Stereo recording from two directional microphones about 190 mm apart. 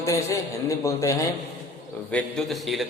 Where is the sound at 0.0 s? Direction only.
15° left (ahead or behind).